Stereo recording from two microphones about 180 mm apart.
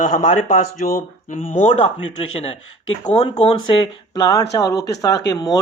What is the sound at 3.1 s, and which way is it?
Speech, 35° left (ahead or behind).